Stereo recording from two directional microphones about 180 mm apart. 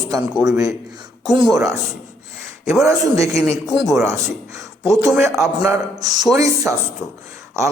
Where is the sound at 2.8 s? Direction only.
15° right (ahead or behind).